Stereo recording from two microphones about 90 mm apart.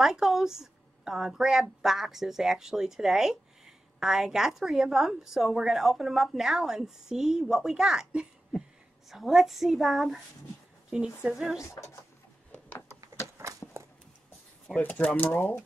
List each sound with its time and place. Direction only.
0.0 s a woman's voice: 5° right (ahead or behind)
13.6 s a sound: 20° left (ahead or behind)
14.8 s speech: 15° left (ahead or behind)